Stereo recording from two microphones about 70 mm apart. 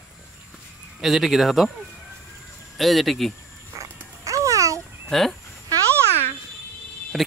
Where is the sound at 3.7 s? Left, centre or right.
Right.